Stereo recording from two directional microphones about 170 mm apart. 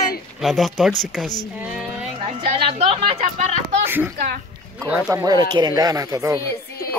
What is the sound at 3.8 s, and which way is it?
Speech, 10° right (ahead or behind).